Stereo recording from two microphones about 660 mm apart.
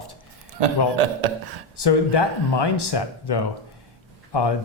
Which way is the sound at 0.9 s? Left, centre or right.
Right.